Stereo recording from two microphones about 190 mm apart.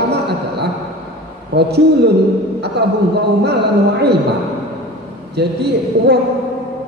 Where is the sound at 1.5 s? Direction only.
60° right (ahead or behind).